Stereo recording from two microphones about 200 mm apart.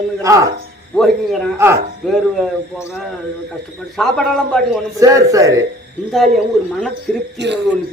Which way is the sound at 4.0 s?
Centre (ahead or behind).